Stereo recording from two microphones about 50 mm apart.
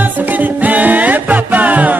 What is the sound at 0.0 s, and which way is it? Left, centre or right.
Music, right.